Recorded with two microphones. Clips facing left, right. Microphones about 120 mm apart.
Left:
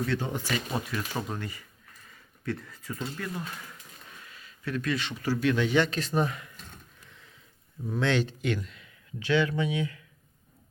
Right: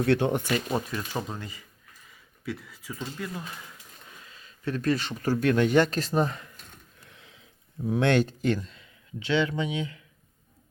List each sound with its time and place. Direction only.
0.0 s speech: 65° right (ahead or behind)
0.4 s speech: 20° right (ahead or behind)
2.4 s speech: 5° right (ahead or behind)
4.3 s speech: 30° right (ahead or behind)
6.1 s speech: 30° right (ahead or behind)
7.1 s sniff: 80° right
7.9 s speech: 60° right (ahead or behind); by 10.0 s 20° right (ahead or behind)